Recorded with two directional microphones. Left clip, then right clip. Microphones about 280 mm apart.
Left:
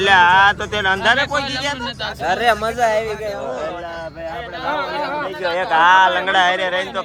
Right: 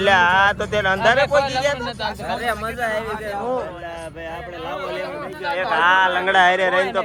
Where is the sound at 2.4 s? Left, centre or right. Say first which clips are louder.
Left 7 dB; left.